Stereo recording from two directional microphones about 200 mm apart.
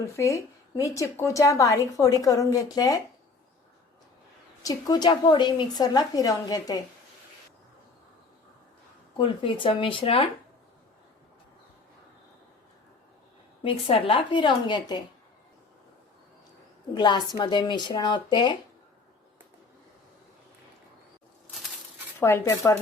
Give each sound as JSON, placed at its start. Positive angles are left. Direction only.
{"t": 0.2, "sound": "a woman's voice", "side_deg": 15}
{"t": 4.6, "sound": "a woman's voice", "side_deg": 20}
{"t": 9.1, "sound": "a woman's voice", "side_deg": 25}
{"t": 13.7, "sound": "a woman's voice", "side_deg": 25}
{"t": 16.9, "sound": "a woman's voice", "side_deg": 20}
{"t": 22.2, "sound": "a woman's voice", "side_deg": 15}